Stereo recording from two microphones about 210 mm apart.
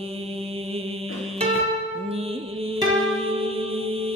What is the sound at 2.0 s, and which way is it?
Music, 25° right (ahead or behind).